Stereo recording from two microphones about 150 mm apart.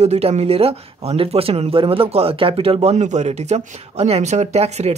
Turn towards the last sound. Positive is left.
turn(degrees=-45)  # may be behind; listen again after turning